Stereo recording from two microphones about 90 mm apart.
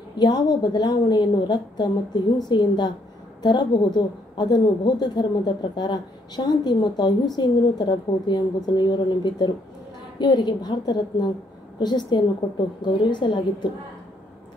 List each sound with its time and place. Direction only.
0.2 s a woman's voice: 50° left (ahead or behind)